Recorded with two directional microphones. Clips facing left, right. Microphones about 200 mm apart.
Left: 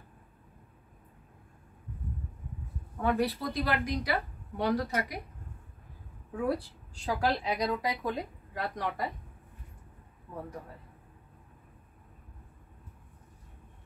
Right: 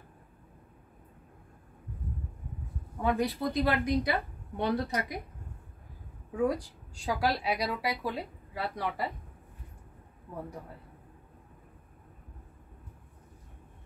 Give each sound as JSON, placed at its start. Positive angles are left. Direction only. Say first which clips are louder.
{"t": 3.0, "sound": "a woman's voice", "louder": "even", "side_deg": -15}
{"t": 6.3, "sound": "speech", "louder": "right 2 dB", "side_deg": -15}